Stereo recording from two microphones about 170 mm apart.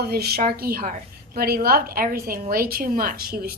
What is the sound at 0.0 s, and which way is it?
Speech, 65° right (ahead or behind).